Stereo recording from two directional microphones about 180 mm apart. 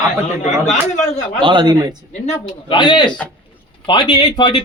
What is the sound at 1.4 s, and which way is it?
Speech, 25° right (ahead or behind).